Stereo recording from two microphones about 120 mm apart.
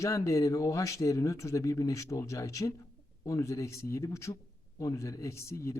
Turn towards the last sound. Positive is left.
turn(degrees=25)  # may be behind; listen again after turning